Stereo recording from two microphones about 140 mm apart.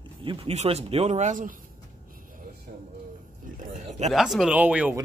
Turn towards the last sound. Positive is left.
turn(degrees=-10)  # may be behind; listen again after turning